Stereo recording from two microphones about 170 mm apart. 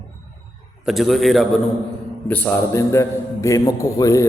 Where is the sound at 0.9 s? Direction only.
Centre (ahead or behind); by 4.3 s 20° left (ahead or behind).